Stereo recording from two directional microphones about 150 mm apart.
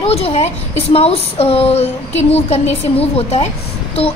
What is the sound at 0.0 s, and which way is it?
A woman's voice, 40° left (ahead or behind).